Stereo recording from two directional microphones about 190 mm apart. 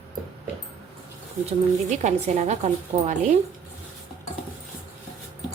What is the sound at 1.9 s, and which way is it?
A woman's voice, 35° right (ahead or behind).